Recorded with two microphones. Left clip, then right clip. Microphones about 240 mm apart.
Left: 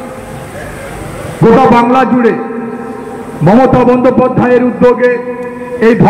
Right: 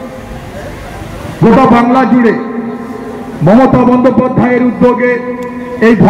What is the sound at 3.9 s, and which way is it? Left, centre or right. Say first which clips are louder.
A man's voice: left 1 dB; left.